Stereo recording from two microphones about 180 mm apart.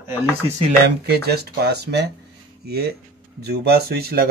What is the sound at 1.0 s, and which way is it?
A man's voice, 65° right (ahead or behind).